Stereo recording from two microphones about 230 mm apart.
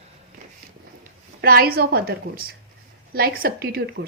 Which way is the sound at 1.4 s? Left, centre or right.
Right.